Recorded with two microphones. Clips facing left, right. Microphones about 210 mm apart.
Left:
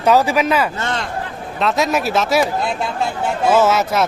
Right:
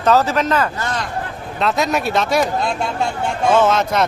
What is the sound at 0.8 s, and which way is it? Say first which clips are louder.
Speech: left 1 dB; 25° left (ahead or behind).